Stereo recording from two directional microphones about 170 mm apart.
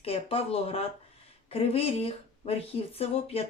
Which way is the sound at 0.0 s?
35° left (ahead or behind).